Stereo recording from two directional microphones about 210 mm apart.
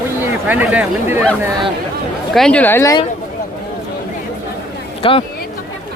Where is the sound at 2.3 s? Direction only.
5° left (ahead or behind).